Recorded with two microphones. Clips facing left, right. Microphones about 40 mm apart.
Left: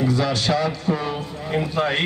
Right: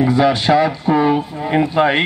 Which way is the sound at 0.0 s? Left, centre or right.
Right.